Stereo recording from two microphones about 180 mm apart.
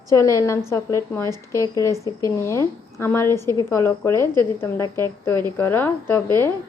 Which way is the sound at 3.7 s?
15° left (ahead or behind).